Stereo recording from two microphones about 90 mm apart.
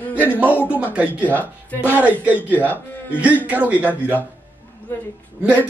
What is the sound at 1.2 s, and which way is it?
Speech, 20° left (ahead or behind).